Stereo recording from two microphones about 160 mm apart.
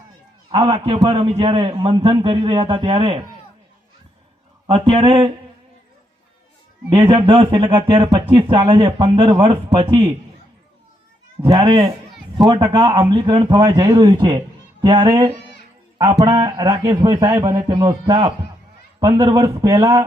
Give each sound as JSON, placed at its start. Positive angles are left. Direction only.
{"t": 0.5, "sound": "a man's voice", "side_deg": -30}
{"t": 4.7, "sound": "a man's voice", "side_deg": -35}
{"t": 6.9, "sound": "a man's voice", "side_deg": -30}
{"t": 11.4, "sound": "a man's voice", "side_deg": -25}